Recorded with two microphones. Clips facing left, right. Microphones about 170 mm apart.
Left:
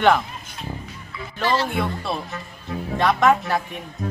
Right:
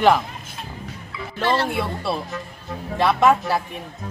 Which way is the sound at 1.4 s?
60° right (ahead or behind).